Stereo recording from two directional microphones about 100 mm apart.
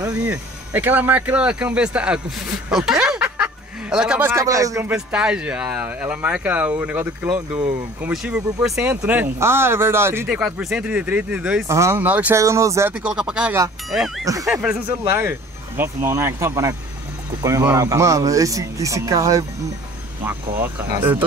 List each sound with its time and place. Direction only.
0.7 s speech: 20° right (ahead or behind)
4.2 s speech: 25° right (ahead or behind)
4.9 s speech: 10° right (ahead or behind)
8.1 s speech: 5° right (ahead or behind)
8.8 s speech: 15° right (ahead or behind)
10.2 s speech: 10° right (ahead or behind)
11.6 s speech: 30° right (ahead or behind)
12.0 s speech: 15° right (ahead or behind)
12.4 s speech: 30° right (ahead or behind)
12.9 s speech: 10° right (ahead or behind)
15.0 s speech: 25° right (ahead or behind)